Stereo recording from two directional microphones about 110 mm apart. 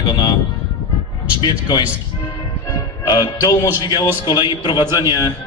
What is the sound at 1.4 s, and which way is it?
Speech, 40° left (ahead or behind).